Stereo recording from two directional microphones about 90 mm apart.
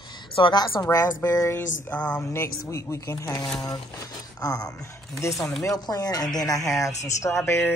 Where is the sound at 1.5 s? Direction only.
20° left (ahead or behind).